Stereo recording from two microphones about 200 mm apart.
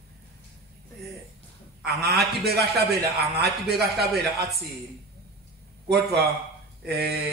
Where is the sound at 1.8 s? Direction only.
Centre (ahead or behind).